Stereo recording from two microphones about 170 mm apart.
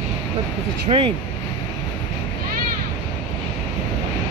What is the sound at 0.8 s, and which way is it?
Speech, 35° right (ahead or behind).